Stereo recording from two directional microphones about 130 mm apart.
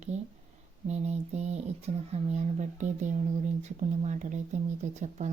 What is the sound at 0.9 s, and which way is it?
A woman's voice, 60° right (ahead or behind).